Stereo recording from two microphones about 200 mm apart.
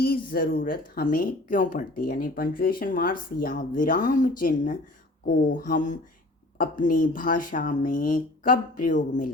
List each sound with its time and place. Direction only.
0.0 s speech: 50° left (ahead or behind)